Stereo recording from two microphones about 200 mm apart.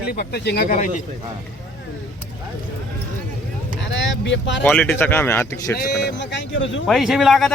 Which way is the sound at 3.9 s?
70° left (ahead or behind).